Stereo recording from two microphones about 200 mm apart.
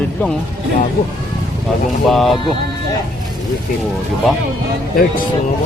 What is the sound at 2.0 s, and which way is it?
Speech, centre (ahead or behind).